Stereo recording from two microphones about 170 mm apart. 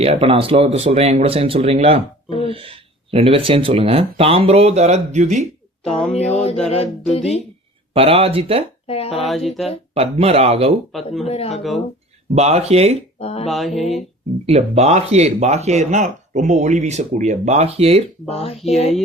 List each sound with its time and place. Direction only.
0.0 s speech: 35° right (ahead or behind)
6.3 s a sound: 35° left (ahead or behind)
7.9 s speech: 35° right (ahead or behind)
8.9 s speech: 35° left (ahead or behind)
9.2 s speech: centre (ahead or behind)
9.9 s speech: 35° right (ahead or behind)
10.9 s speech: centre (ahead or behind)
11.3 s a sound: 35° left (ahead or behind)
11.5 s speech: centre (ahead or behind)
12.3 s speech: 40° right (ahead or behind)
13.1 s speech: 35° left (ahead or behind)
13.5 s speech: centre (ahead or behind)
14.4 s speech: 40° right (ahead or behind)
18.3 s a sound: 40° left (ahead or behind)